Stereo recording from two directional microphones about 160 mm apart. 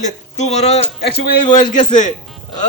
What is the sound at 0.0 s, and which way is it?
Speech, 45° left (ahead or behind).